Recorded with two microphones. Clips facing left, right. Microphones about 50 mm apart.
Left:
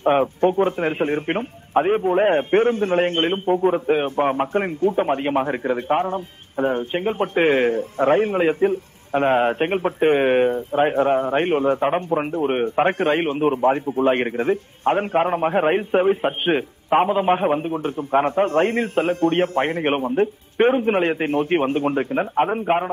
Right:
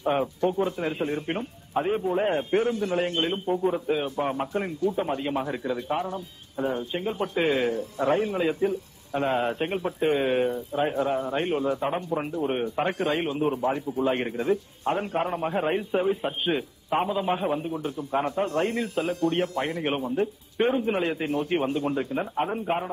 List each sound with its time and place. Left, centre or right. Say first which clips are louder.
0.0 s a man's voice: left 7 dB; left